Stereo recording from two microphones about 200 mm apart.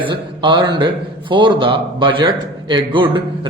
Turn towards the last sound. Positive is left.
turn(degrees=-25)  # may be behind; listen again after turning